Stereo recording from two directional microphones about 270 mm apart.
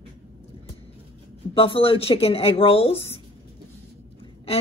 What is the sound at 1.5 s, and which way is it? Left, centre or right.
Speech, left.